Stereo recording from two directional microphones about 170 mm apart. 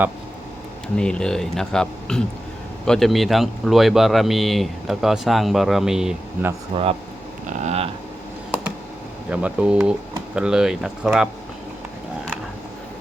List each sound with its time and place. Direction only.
0.9 s speech: 5° left (ahead or behind)
7.6 s a sound: 40° right (ahead or behind)
9.3 s speech: 5° right (ahead or behind)